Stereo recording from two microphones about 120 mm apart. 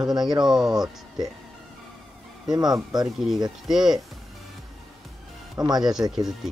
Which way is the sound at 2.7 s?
35° right (ahead or behind).